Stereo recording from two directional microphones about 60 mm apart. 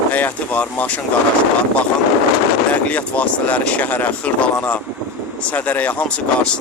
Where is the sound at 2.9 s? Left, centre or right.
Left.